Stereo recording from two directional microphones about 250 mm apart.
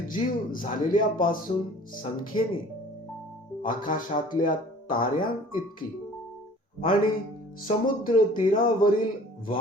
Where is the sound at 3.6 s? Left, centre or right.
Left.